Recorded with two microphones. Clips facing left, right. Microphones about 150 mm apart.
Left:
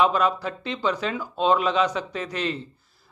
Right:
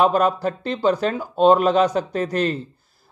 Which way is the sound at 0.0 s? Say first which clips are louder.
Right 4 dB; 45° right (ahead or behind).